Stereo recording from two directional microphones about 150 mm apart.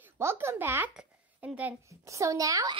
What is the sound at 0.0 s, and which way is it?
A woman's voice, 15° right (ahead or behind).